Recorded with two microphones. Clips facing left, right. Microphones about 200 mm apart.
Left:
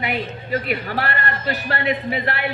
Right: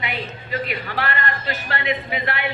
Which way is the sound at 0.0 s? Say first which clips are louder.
Left 4 dB; 40° left (ahead or behind).